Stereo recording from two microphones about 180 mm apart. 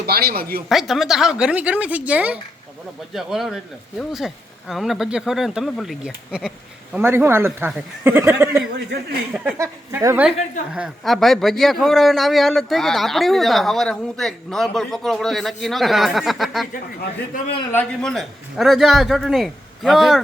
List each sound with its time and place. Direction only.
0.0 s speech: 60° right (ahead or behind)
0.7 s a man's voice: centre (ahead or behind)
9.3 s a man's voice: 5° right (ahead or behind)
9.6 s a man's voice: 15° right (ahead or behind); by 16.6 s centre (ahead or behind)
17.7 s a man's voice: 5° left (ahead or behind)